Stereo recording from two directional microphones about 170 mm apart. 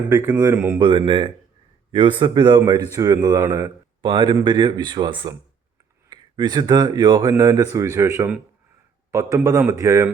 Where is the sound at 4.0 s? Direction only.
25° right (ahead or behind).